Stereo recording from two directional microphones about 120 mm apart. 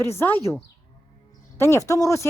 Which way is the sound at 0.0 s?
20° left (ahead or behind).